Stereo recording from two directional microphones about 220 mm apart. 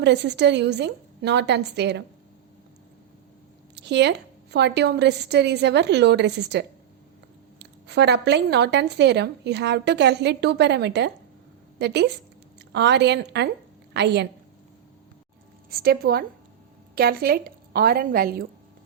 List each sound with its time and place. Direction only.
0.0 s a woman's voice: 50° right (ahead or behind)
3.8 s a woman's voice: 50° right (ahead or behind)
15.7 s a woman's voice: 45° right (ahead or behind)